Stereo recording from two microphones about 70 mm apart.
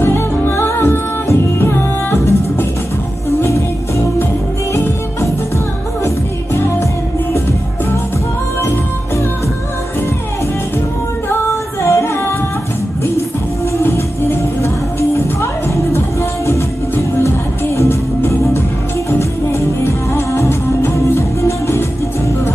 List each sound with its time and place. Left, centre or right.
0.0 s music: left
6.0 s music: left
11.8 s music: left
13.8 s music: left
16.4 s music: left